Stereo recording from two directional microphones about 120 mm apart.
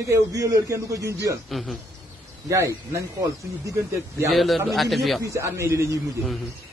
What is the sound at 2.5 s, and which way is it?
Speech, 25° right (ahead or behind).